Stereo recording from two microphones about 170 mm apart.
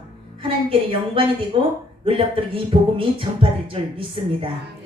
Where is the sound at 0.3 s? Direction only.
30° right (ahead or behind).